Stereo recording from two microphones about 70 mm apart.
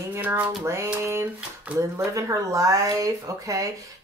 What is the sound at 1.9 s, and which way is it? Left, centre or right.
Speech, right.